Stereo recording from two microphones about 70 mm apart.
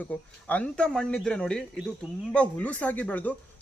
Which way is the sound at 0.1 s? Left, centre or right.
Left.